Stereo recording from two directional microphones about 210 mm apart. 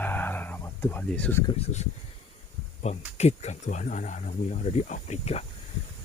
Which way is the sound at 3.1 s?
30° left (ahead or behind).